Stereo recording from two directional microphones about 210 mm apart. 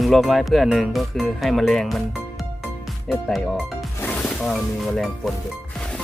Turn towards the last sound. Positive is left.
turn(degrees=5)  # may be behind; listen again after turning